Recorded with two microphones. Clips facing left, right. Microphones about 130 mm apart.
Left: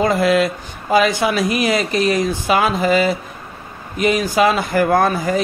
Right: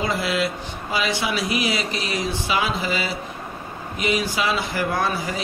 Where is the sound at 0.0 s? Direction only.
50° left (ahead or behind).